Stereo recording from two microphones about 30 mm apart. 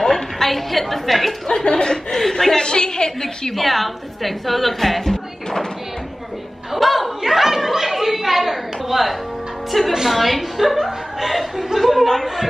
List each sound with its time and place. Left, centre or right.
0.0 s a woman's voice: centre
1.5 s speech: left
2.0 s speech: centre
3.5 s a woman's voice: centre
6.7 s a sound: centre
9.7 s a woman's voice: centre